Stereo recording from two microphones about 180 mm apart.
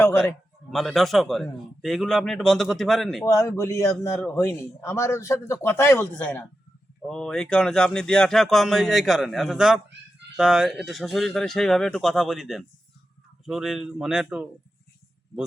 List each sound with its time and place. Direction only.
0.7 s speech: centre (ahead or behind)
3.2 s a man's voice: 15° left (ahead or behind); by 14.4 s 5° right (ahead or behind)